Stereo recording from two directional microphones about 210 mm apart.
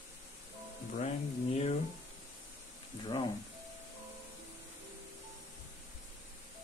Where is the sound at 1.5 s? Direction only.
30° left (ahead or behind).